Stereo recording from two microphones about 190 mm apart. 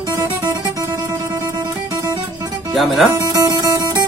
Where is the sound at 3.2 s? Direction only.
20° right (ahead or behind).